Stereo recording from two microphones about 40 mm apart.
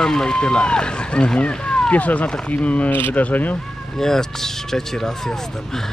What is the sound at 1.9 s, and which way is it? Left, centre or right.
Speech, left.